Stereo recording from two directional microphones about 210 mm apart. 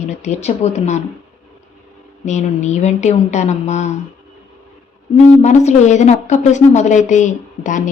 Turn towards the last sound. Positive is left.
turn(degrees=35)  # may be behind; listen again after turning